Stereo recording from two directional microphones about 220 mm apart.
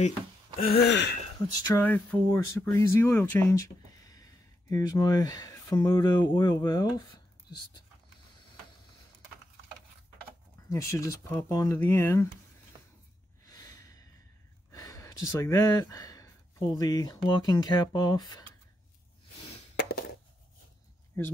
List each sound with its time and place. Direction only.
0.6 s gasp: 45° left (ahead or behind)
1.6 s speech: 10° left (ahead or behind)
10.7 s speech: 15° left (ahead or behind)
13.5 s snort: 15° left (ahead or behind)
14.7 s speech: 15° left (ahead or behind)
19.8 s a sound: 45° left (ahead or behind)
21.2 s speech: 10° left (ahead or behind)